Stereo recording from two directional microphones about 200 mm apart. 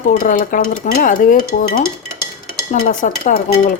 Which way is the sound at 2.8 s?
40° left (ahead or behind).